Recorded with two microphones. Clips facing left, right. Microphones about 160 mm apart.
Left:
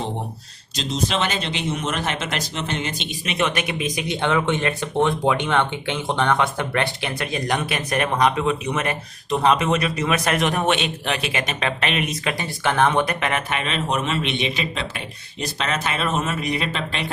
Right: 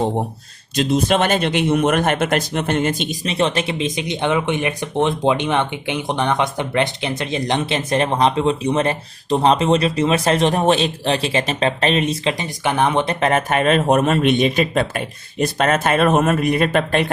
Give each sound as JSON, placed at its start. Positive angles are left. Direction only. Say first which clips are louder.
{"t": 0.8, "sound": "speech", "louder": "right 7 dB", "side_deg": -55}
{"t": 3.2, "sound": "speech", "louder": "right 3 dB", "side_deg": -30}
{"t": 13.1, "sound": "a man's voice", "louder": "right 7 dB", "side_deg": -40}